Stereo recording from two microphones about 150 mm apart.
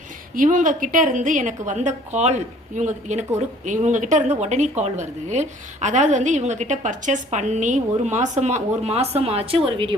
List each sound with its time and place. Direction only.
0.3 s a woman's voice: 60° right (ahead or behind); by 9.9 s 35° right (ahead or behind)